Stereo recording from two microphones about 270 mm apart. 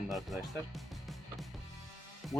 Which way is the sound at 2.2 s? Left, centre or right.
Centre.